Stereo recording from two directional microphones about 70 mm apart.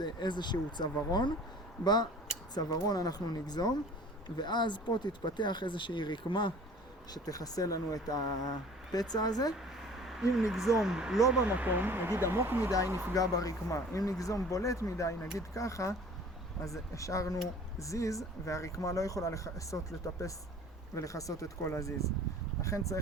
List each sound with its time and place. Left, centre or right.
0.0 s speech: left
2.6 s speech: left
7.1 s speech: left
9.6 s a sound: centre
10.8 s speech: centre
11.3 s speech: right
13.1 s speech: left
20.9 s speech: left